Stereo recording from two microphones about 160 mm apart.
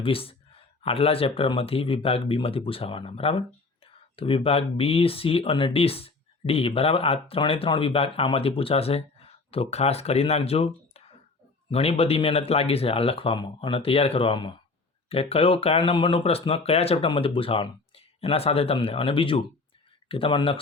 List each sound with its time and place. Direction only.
0.0 s speech: 35° left (ahead or behind)
11.7 s speech: 40° left (ahead or behind)